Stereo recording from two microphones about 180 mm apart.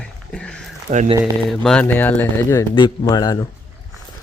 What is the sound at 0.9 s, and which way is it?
Speech, 45° right (ahead or behind).